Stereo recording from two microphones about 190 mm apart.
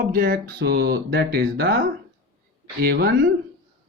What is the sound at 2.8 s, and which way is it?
Speech, 60° right (ahead or behind).